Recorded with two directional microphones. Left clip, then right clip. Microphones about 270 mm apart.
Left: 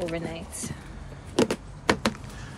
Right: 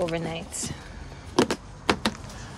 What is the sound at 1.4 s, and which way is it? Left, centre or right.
Power windows, centre.